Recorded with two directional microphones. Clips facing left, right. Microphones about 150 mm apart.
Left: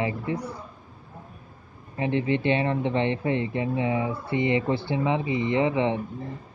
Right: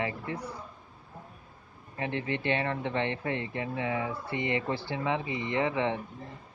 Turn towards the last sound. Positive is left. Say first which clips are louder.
# left 5 dB
turn(degrees=20)  # may be behind; listen again after turning